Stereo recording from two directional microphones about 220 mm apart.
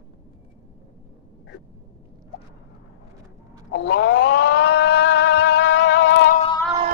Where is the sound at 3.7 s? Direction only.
50° left (ahead or behind).